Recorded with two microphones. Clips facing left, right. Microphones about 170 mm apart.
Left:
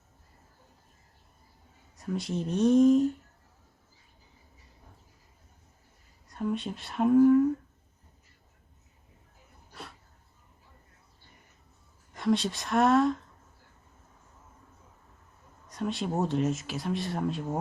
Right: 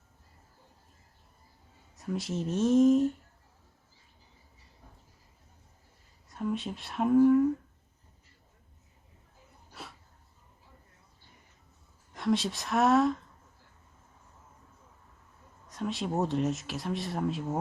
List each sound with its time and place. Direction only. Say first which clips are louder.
2.0 s speech: left 1 dB; centre (ahead or behind)
6.2 s speech: left 1 dB; centre (ahead or behind)
9.7 s a sound: left 1 dB; centre (ahead or behind)
12.1 s speech: left 2 dB; centre (ahead or behind)
15.6 s speech: left 2 dB; centre (ahead or behind)